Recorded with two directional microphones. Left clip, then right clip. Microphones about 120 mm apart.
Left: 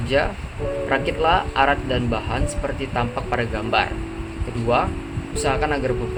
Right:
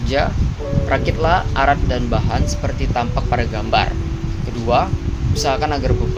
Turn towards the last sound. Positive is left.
turn(degrees=-20)  # may be behind; listen again after turning